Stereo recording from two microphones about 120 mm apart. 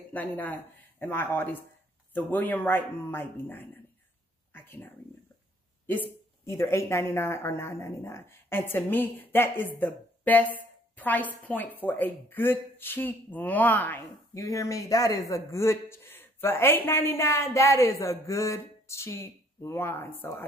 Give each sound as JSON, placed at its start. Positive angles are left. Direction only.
{"t": 0.1, "sound": "speech", "side_deg": 15}
{"t": 4.6, "sound": "a sound", "side_deg": 20}
{"t": 5.9, "sound": "speech", "side_deg": 20}
{"t": 14.3, "sound": "a man's voice", "side_deg": 25}